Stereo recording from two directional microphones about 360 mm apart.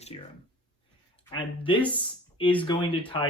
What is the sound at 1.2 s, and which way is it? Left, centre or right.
Speech, centre.